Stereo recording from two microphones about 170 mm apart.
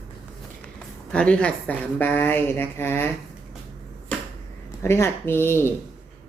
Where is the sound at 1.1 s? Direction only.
5° left (ahead or behind).